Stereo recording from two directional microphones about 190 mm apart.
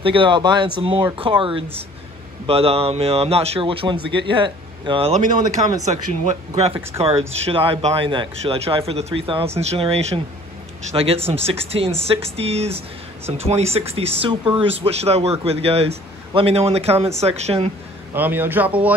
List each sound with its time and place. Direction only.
0.0 s speech: 25° right (ahead or behind)
18.1 s speech: 10° right (ahead or behind)